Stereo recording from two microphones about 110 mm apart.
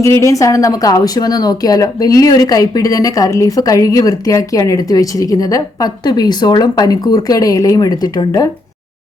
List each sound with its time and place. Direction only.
0.0 s speech: 30° left (ahead or behind)